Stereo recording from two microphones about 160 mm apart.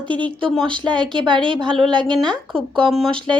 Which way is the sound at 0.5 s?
5° left (ahead or behind).